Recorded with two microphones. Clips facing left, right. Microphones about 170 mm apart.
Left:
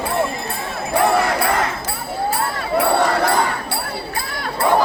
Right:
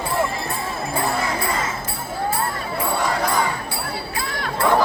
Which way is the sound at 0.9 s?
70° left (ahead or behind).